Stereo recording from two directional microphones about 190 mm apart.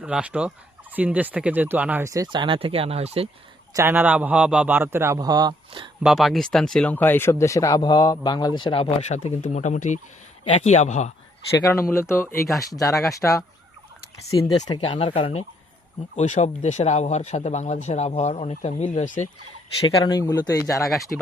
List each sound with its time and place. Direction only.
0.0 s fowl: 5° right (ahead or behind); by 3.2 s 30° right (ahead or behind)
3.8 s fowl: 10° right (ahead or behind)
6.0 s speech: centre (ahead or behind); by 11.1 s 35° left (ahead or behind)
11.7 s speech: 15° left (ahead or behind)
14.8 s speech: 30° left (ahead or behind)
20.0 s speech: 20° left (ahead or behind)